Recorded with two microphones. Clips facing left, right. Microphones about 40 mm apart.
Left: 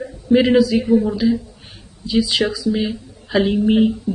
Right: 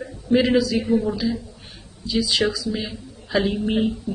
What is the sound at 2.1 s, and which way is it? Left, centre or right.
Speech, left.